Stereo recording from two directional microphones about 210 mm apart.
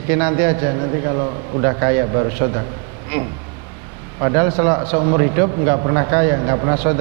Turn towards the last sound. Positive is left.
turn(degrees=-20)  # may be behind; listen again after turning